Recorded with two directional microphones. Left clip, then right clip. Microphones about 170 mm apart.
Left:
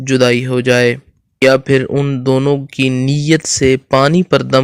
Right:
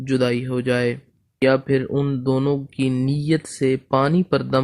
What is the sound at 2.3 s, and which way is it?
Speech, 30° left (ahead or behind).